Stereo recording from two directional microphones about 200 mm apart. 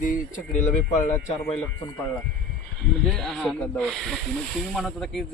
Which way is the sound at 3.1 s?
Centre (ahead or behind).